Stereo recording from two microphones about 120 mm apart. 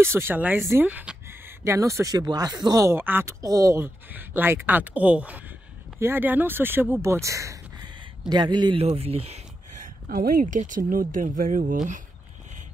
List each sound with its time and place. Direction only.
0.0 s speech: 20° right (ahead or behind)
3.8 s speech: 15° right (ahead or behind)
8.3 s a man's voice: 40° right (ahead or behind)
8.7 s speech: 55° right (ahead or behind)
10.4 s speech: 90° right